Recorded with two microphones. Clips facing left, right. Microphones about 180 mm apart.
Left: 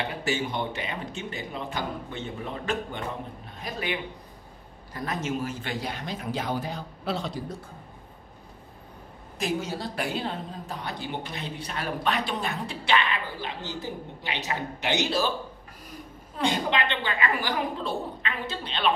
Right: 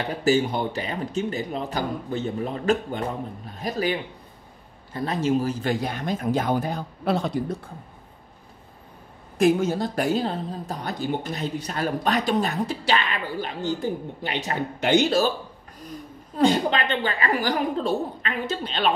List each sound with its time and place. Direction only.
0.2 s speech: 40° right (ahead or behind); by 7.4 s 55° right (ahead or behind)
9.4 s speech: 50° right (ahead or behind)
16.3 s speech: 40° right (ahead or behind)